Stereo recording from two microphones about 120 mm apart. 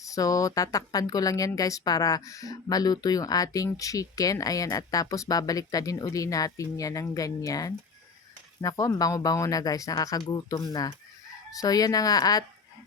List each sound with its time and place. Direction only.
0.0 s speech: 30° left (ahead or behind)